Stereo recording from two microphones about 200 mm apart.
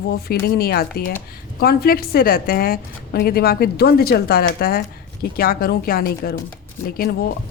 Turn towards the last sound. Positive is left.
turn(degrees=50)  # may be behind; listen again after turning